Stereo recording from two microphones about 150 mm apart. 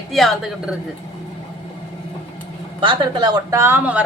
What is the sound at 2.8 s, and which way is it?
A woman's voice, 30° right (ahead or behind).